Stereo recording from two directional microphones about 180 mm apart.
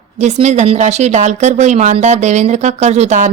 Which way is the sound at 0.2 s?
40° right (ahead or behind).